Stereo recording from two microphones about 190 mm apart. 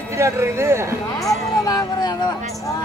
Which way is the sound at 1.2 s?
20° left (ahead or behind).